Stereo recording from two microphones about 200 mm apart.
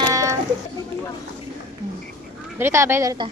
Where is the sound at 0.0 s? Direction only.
15° right (ahead or behind).